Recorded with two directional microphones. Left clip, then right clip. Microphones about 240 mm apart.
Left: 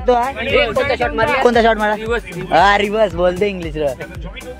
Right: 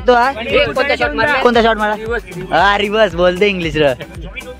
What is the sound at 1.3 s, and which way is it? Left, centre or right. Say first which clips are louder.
Speech: right 1 dB; centre.